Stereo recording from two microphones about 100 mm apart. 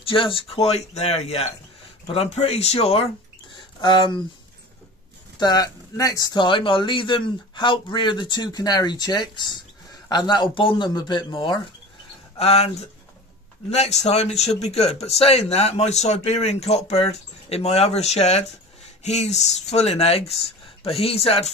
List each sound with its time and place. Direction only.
0.0 s speech: 60° left (ahead or behind); by 3.1 s 85° left
3.5 s speech: 55° left (ahead or behind)
5.4 s speech: 40° left (ahead or behind)
12.4 s speech: 80° left
13.7 s speech: 90° left
20.8 s speech: 70° left (ahead or behind)